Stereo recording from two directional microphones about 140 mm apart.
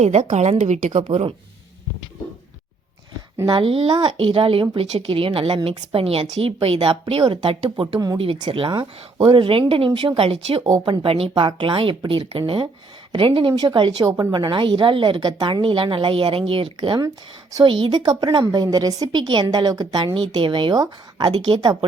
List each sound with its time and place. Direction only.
0.0 s a woman's voice: 50° right (ahead or behind)
3.5 s a woman's voice: 40° right (ahead or behind)
7.9 s a woman's voice: 25° right (ahead or behind)
8.2 s a woman's voice: 40° right (ahead or behind)